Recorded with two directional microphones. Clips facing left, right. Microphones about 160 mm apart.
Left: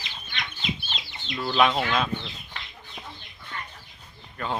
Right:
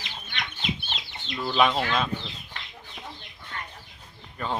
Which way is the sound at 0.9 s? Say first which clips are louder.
Left 1 dB; centre (ahead or behind).